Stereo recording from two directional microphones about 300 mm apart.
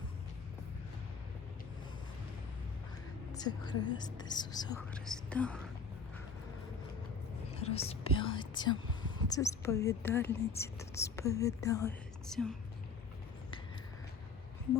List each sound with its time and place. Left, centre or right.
3.3 s speech: centre
4.9 s speech: centre
7.5 s speech: centre